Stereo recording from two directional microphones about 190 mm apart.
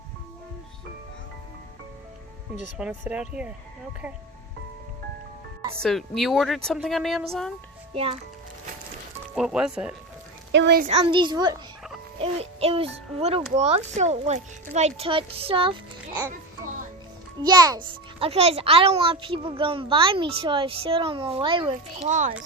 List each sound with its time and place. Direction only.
2.7 s speech: 5° right (ahead or behind)
5.8 s speech: centre (ahead or behind)
7.9 s a child's voice: 30° right (ahead or behind)
9.3 s speech: 5° right (ahead or behind)
10.5 s speech: 65° right (ahead or behind)
10.8 s a child's voice: 30° right (ahead or behind)
17.4 s a child's voice: 20° right (ahead or behind); by 22.4 s 40° right (ahead or behind)